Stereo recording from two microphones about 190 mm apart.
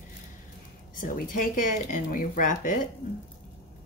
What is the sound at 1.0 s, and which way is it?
Speech, 45° left (ahead or behind).